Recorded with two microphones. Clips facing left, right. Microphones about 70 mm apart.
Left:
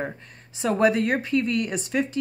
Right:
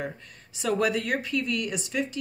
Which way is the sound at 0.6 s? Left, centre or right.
Left.